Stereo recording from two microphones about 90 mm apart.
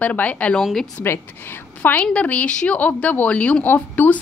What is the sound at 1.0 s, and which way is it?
Speech, 30° left (ahead or behind).